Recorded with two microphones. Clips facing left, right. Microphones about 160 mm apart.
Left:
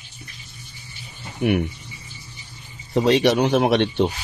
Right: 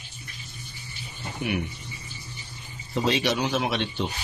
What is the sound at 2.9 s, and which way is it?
Speech, 60° left (ahead or behind).